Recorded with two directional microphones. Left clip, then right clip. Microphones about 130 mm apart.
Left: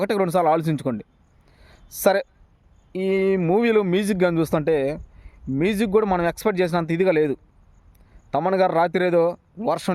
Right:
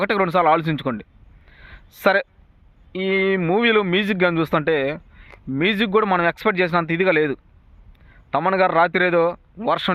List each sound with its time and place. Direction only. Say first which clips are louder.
0.0 s speech: right 2 dB; 25° left (ahead or behind)
1.5 s a sound: right 5 dB; 30° left (ahead or behind)
3.0 s speech: right 1 dB; 20° left (ahead or behind)